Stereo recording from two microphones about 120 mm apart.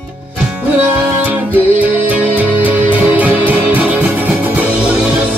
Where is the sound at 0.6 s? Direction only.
15° right (ahead or behind).